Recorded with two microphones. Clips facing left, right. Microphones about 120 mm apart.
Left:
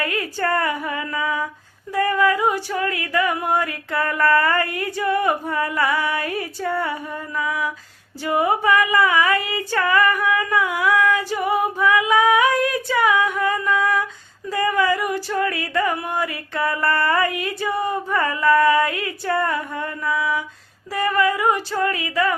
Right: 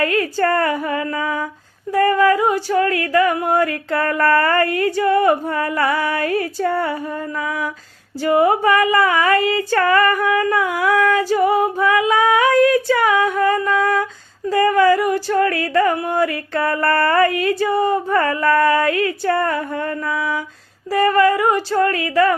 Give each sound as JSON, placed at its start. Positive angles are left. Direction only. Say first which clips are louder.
{"t": 0.0, "sound": "female singing", "louder": "right 6 dB", "side_deg": -40}
{"t": 4.4, "sound": "a sound", "louder": "right 4 dB", "side_deg": -45}
{"t": 4.9, "sound": "female singing", "louder": "right 4 dB", "side_deg": -30}
{"t": 15.7, "sound": "female singing", "louder": "right 5 dB", "side_deg": -35}
{"t": 18.2, "sound": "female singing", "louder": "left 1 dB", "side_deg": -45}